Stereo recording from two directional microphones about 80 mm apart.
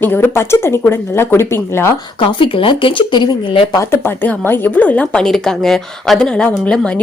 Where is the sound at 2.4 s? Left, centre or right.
Left.